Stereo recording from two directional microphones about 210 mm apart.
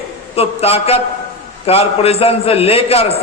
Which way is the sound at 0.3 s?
30° left (ahead or behind).